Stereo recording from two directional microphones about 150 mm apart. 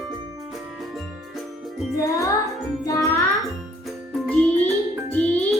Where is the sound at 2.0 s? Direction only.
20° left (ahead or behind).